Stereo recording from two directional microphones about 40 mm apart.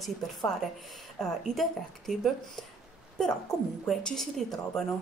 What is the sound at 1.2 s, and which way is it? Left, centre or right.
Speech, centre.